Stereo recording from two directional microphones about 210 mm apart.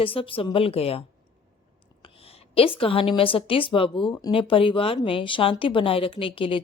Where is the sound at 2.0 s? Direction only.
25° left (ahead or behind).